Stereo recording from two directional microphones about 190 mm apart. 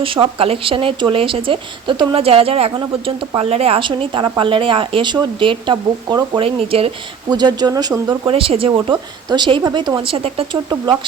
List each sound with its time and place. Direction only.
0.0 s speech: 30° right (ahead or behind)